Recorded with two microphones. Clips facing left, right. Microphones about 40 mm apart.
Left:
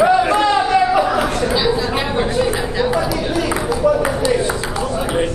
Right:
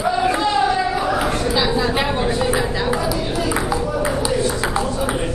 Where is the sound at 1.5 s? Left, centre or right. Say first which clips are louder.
Left 1 dB; centre.